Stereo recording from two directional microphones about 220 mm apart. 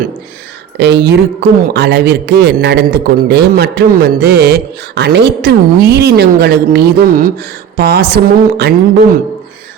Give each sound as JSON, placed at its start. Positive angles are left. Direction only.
{"t": 0.8, "sound": "a man's voice", "side_deg": -50}